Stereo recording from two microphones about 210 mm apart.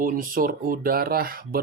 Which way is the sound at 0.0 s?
40° right (ahead or behind).